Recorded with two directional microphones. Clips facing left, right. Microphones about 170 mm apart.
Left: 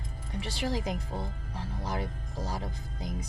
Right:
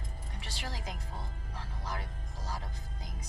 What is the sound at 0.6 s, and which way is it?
Speech, 25° left (ahead or behind).